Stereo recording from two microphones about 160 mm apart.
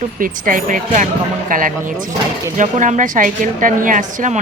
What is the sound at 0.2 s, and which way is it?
A woman's voice, 60° right (ahead or behind).